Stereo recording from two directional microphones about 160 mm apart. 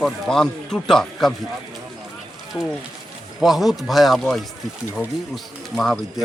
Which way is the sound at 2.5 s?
20° left (ahead or behind).